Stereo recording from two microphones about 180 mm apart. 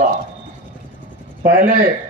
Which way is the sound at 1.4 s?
50° right (ahead or behind).